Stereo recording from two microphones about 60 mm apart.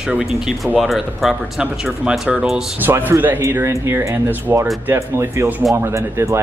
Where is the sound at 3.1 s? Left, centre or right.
Right.